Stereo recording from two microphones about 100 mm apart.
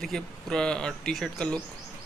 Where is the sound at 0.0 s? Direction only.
5° left (ahead or behind).